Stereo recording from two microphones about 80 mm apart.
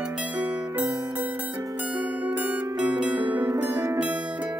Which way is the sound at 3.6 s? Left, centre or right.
Right.